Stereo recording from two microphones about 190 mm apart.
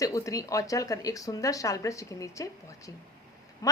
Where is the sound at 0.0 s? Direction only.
20° left (ahead or behind).